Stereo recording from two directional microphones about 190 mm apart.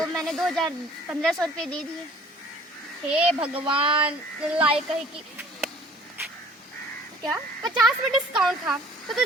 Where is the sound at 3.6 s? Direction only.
25° right (ahead or behind).